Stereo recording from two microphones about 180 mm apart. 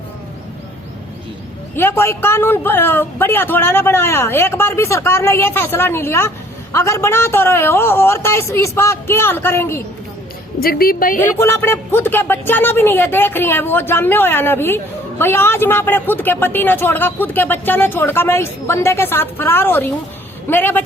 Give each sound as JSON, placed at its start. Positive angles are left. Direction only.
{"t": 1.7, "sound": "speech", "side_deg": 10}
{"t": 10.6, "sound": "a woman's voice", "side_deg": 55}
{"t": 11.2, "sound": "speech", "side_deg": 15}